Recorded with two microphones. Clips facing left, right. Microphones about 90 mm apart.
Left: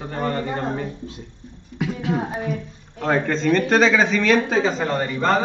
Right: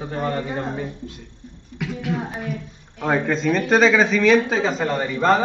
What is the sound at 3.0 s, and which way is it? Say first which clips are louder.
Speech: even; 5° right (ahead or behind).